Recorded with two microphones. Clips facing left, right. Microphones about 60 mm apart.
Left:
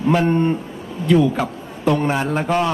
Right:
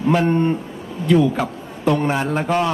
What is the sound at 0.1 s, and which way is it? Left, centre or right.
Speech, left.